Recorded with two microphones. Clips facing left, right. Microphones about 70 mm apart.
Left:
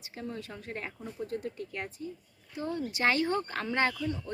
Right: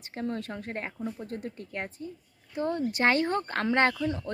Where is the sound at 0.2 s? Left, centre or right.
Right.